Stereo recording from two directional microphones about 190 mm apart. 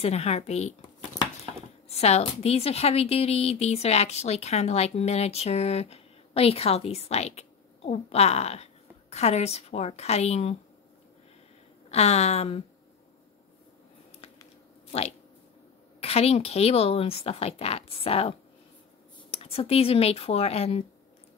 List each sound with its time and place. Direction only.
0.0 s a woman's voice: 35° left (ahead or behind)
1.9 s a woman's voice: 35° left (ahead or behind)
11.9 s a woman's voice: 35° left (ahead or behind)
16.0 s a woman's voice: 30° left (ahead or behind)
19.3 s a woman's voice: 30° left (ahead or behind)